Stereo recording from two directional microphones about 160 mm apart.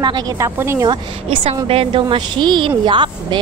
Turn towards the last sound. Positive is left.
turn(degrees=-30)  # may be behind; listen again after turning